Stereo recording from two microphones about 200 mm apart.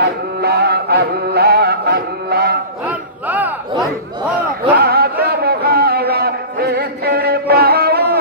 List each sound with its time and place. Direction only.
0.0 s music: 50° right (ahead or behind)
2.9 s battle cry: 10° right (ahead or behind)
4.7 s a sound: 50° right (ahead or behind)
5.2 s music: 50° right (ahead or behind)